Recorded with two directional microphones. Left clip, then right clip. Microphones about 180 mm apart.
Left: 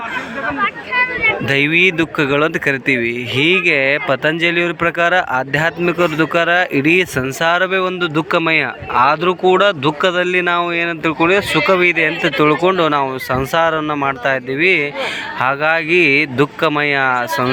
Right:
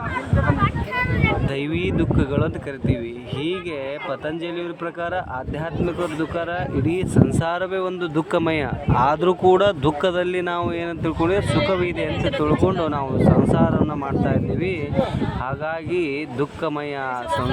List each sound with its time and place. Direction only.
0.6 s speech: 75° right (ahead or behind)
1.5 s speech: 5° left (ahead or behind)